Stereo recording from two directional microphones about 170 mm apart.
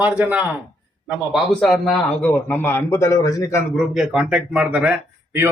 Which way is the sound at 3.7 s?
Centre (ahead or behind).